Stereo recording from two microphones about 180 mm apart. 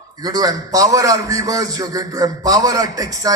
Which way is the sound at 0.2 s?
20° right (ahead or behind).